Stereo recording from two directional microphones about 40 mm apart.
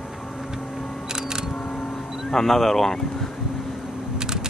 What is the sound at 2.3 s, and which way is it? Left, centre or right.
Speech, centre.